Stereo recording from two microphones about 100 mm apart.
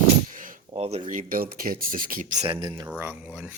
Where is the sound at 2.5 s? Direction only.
50° right (ahead or behind).